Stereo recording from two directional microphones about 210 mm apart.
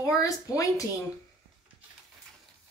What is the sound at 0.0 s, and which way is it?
Speech, 15° left (ahead or behind).